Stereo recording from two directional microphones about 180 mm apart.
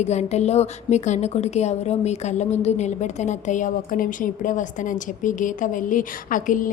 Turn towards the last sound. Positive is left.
turn(degrees=45)  # may be behind; listen again after turning